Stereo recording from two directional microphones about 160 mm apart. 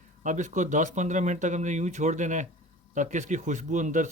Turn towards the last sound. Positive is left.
turn(degrees=-50)  # may be behind; listen again after turning